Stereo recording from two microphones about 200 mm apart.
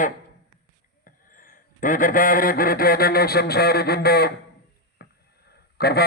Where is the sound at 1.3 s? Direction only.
40° left (ahead or behind).